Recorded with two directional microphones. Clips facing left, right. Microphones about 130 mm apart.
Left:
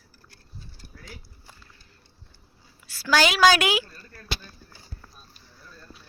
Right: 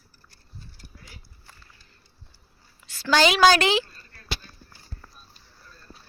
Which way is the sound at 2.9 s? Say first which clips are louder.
Right 2 dB; 10° left (ahead or behind).